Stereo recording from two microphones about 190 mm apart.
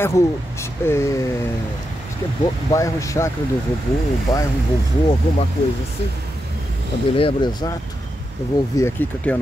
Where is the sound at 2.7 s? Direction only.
15° left (ahead or behind).